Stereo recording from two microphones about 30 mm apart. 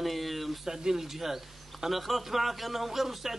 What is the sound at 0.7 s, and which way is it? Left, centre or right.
A man's voice, centre.